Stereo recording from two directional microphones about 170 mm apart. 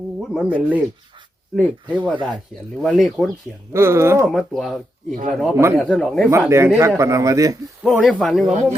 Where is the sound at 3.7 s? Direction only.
15° right (ahead or behind).